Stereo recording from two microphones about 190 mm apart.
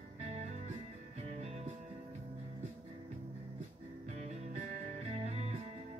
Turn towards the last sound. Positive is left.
turn(degrees=-35)  # may be behind; listen again after turning